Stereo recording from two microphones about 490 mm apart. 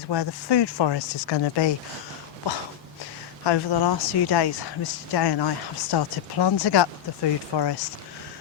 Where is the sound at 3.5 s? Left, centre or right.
Left.